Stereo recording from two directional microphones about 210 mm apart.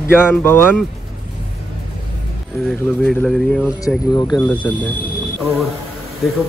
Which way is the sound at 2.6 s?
5° left (ahead or behind).